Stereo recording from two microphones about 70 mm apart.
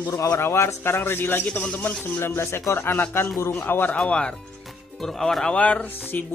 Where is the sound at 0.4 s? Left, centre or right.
Left.